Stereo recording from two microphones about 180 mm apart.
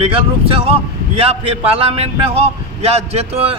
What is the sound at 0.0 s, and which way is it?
Speech, 30° right (ahead or behind).